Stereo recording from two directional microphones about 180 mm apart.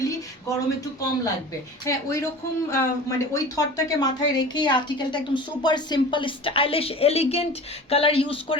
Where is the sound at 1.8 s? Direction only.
15° left (ahead or behind).